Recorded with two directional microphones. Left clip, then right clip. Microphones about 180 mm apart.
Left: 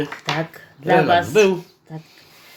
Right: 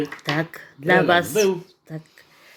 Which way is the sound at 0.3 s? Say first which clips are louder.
Even; 40° right (ahead or behind).